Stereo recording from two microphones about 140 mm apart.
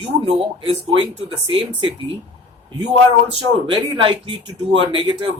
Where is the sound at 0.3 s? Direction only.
45° right (ahead or behind).